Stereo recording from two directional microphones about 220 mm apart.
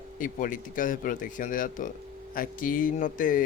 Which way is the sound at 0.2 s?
35° left (ahead or behind).